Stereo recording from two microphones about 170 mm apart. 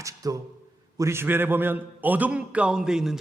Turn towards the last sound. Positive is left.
turn(degrees=-5)  # may be behind; listen again after turning